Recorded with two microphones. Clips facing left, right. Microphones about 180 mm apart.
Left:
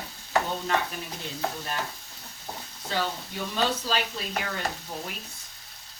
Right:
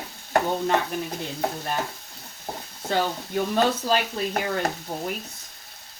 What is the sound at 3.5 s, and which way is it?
Speech, 50° right (ahead or behind).